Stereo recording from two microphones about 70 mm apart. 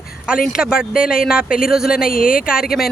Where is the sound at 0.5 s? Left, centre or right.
Centre.